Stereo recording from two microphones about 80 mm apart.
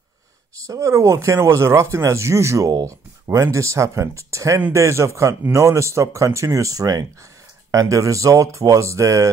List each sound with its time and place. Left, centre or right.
0.7 s speech: right